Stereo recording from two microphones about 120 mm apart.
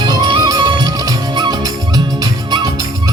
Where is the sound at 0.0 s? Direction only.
35° right (ahead or behind).